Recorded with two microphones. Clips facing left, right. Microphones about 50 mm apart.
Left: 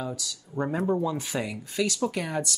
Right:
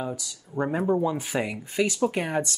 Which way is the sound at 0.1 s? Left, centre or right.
Centre.